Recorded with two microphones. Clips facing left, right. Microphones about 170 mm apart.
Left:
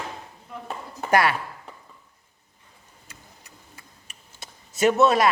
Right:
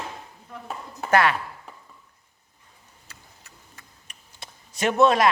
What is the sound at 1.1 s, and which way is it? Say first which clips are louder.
Speech: even; 10° left (ahead or behind).